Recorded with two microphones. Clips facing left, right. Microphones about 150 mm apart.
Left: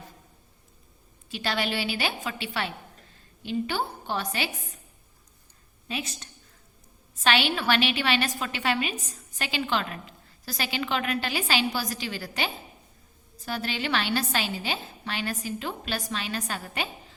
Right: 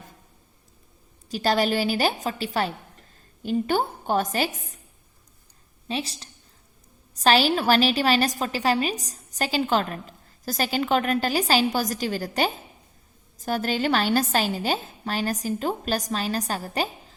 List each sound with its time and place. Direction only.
1.3 s a woman's voice: 40° right (ahead or behind)
5.9 s a woman's voice: 30° right (ahead or behind)